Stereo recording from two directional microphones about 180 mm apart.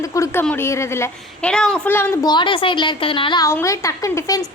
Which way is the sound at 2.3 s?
25° left (ahead or behind).